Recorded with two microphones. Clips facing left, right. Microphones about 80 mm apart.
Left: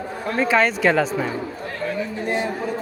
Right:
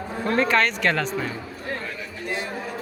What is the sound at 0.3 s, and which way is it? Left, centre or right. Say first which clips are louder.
Speech: left 3 dB; centre.